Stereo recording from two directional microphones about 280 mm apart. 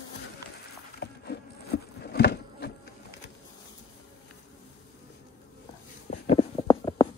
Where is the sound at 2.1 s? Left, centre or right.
Left.